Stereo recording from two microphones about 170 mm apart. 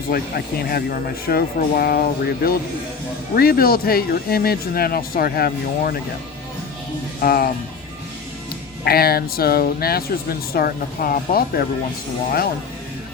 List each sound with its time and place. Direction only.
0.1 s speech: 60° left (ahead or behind)
7.2 s speech: 60° left (ahead or behind)
8.8 s speech: 65° left (ahead or behind)